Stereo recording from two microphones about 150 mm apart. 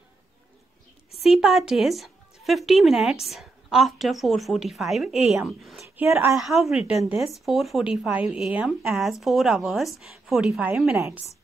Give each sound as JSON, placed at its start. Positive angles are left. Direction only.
{"t": 1.1, "sound": "speech", "side_deg": 0}
{"t": 5.9, "sound": "a woman's voice", "side_deg": -15}
{"t": 6.5, "sound": "a woman's voice", "side_deg": 0}